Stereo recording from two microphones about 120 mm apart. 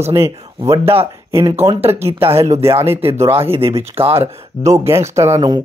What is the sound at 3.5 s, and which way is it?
Speech, 55° right (ahead or behind).